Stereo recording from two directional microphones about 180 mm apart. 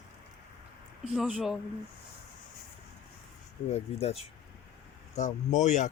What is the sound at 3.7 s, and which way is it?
Speech, 35° left (ahead or behind).